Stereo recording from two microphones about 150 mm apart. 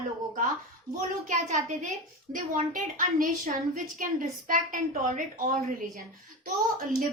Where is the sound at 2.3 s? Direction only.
60° right (ahead or behind).